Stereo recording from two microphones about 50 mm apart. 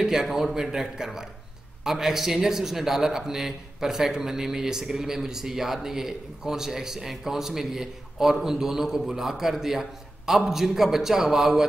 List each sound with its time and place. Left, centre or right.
0.0 s a man's voice: centre